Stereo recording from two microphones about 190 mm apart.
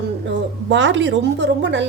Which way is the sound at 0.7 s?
70° right (ahead or behind).